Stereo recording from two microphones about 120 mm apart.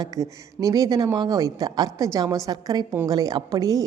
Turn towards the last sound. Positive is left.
turn(degrees=-30)  # may be behind; listen again after turning